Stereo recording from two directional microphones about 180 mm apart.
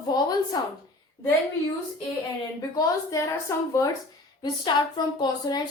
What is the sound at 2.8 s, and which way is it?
A woman's voice, 15° left (ahead or behind).